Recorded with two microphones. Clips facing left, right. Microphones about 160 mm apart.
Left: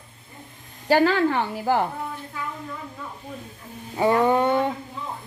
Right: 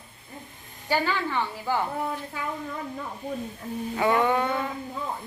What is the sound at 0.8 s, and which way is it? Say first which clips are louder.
Speech: left 8 dB; 85° left.